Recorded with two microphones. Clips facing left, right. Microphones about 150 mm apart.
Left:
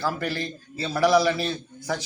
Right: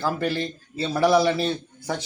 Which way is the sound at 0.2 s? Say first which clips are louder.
Right 4 dB; 25° right (ahead or behind).